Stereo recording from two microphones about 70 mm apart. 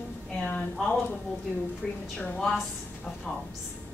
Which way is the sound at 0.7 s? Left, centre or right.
Centre.